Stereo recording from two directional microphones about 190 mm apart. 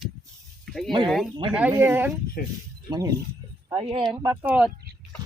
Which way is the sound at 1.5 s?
10° right (ahead or behind).